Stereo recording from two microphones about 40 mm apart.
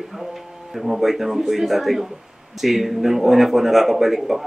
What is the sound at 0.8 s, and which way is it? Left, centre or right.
Speech, centre.